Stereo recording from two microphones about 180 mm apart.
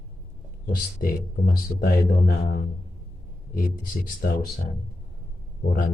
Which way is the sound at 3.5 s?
50° left (ahead or behind).